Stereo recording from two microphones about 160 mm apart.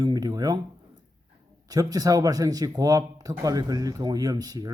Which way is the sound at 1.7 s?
25° right (ahead or behind).